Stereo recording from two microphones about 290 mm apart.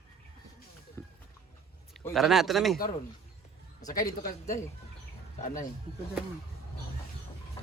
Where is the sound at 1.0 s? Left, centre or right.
Centre.